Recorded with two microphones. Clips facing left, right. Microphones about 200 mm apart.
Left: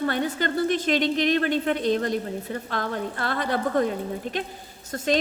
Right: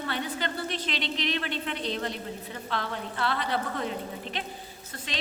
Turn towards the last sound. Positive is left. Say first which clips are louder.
# left 15 dB
turn(degrees=45)  # may be behind; listen again after turning